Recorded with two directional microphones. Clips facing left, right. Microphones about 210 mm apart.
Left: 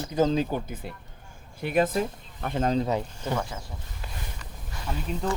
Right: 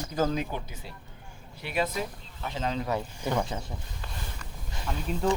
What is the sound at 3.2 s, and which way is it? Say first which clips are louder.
Speech: right 1 dB; 10° right (ahead or behind).